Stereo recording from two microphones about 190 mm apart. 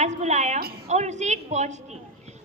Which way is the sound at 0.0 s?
35° right (ahead or behind).